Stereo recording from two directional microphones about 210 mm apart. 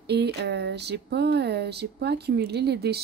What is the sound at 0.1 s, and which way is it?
Speech, 50° right (ahead or behind).